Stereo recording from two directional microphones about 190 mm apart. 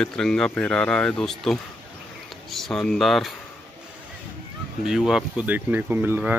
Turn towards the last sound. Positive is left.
turn(degrees=-10)  # may be behind; listen again after turning